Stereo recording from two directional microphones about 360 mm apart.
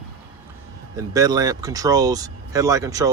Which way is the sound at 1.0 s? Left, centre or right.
Centre.